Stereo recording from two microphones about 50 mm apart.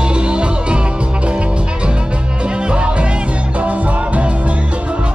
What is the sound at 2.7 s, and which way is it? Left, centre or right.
Music, right.